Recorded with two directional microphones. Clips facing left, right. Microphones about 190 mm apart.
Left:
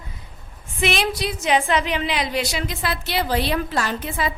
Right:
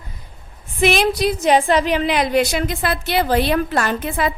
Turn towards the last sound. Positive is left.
turn(degrees=-55)  # may be behind; listen again after turning